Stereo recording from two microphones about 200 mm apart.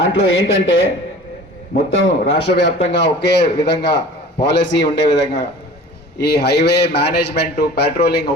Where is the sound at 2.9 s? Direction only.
60° left (ahead or behind).